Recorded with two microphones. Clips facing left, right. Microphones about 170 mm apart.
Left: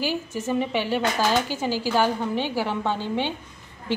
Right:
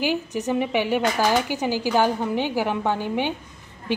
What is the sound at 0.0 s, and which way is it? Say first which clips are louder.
A woman's voice: right 3 dB; 15° right (ahead or behind).